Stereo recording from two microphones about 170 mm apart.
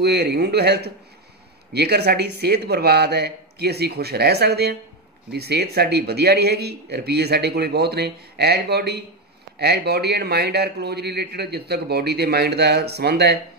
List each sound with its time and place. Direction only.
0.0 s a man's voice: 70° right (ahead or behind)